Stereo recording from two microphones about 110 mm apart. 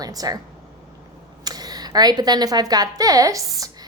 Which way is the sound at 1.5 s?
35° right (ahead or behind).